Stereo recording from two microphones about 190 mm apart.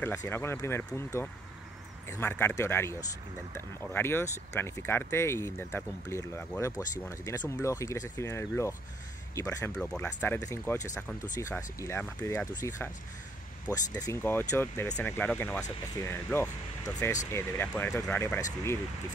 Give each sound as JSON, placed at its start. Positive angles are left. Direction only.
{"t": 0.0, "sound": "speech", "side_deg": 10}
{"t": 9.8, "sound": "speech", "side_deg": 5}
{"t": 13.9, "sound": "speech", "side_deg": 15}